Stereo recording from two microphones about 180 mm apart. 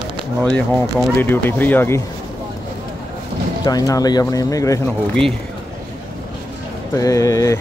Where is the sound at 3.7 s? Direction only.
20° left (ahead or behind).